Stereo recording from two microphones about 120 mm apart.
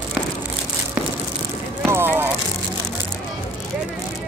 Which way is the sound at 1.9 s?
20° right (ahead or behind).